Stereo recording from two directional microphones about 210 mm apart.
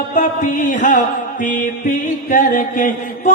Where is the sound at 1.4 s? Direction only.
40° left (ahead or behind).